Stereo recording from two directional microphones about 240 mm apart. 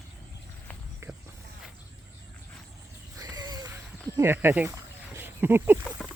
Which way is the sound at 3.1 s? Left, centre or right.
Centre.